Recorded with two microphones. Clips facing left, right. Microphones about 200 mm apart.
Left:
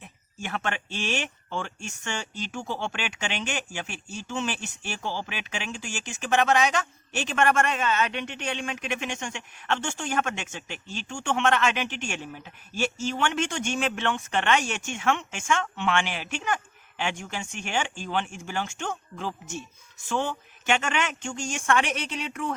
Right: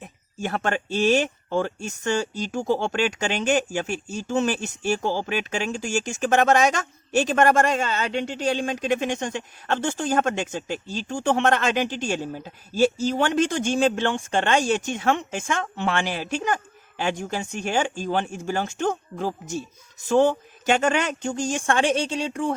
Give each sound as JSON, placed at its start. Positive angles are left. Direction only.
{"t": 0.0, "sound": "speech", "side_deg": -40}